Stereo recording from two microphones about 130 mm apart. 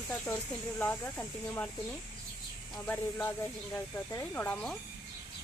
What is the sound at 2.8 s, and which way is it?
Speech, 15° left (ahead or behind).